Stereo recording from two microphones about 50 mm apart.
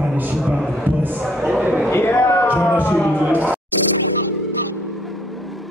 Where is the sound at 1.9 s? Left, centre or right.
Left.